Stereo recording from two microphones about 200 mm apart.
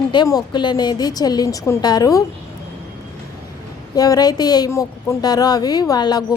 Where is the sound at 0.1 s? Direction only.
20° left (ahead or behind).